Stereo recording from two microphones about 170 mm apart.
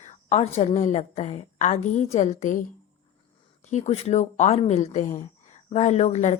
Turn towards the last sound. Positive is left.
turn(degrees=40)  # may be behind; listen again after turning